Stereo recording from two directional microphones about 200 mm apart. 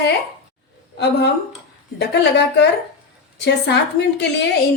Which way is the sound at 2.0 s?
60° left (ahead or behind).